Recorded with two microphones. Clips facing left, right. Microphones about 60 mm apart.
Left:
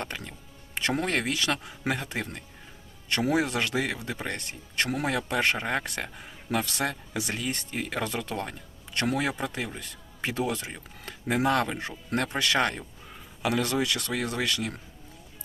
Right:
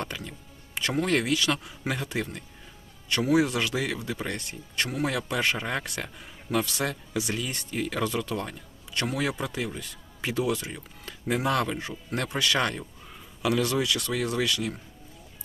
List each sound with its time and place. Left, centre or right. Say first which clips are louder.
0.0 s speech: right 1 dB; left